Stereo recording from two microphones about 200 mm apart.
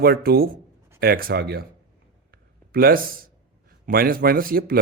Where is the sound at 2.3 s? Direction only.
50° right (ahead or behind).